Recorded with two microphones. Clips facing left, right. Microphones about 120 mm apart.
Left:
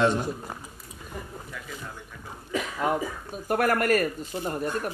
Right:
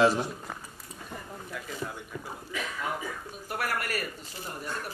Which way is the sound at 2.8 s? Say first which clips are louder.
Left 9 dB; 50° left (ahead or behind).